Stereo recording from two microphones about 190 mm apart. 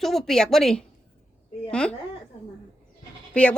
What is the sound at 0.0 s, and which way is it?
A woman's voice, centre (ahead or behind).